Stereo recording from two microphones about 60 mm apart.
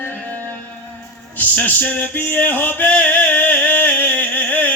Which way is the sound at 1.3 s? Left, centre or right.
Left.